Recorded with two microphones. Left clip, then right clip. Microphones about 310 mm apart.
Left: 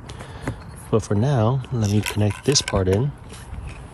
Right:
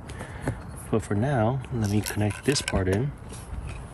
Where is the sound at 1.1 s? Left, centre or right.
Right.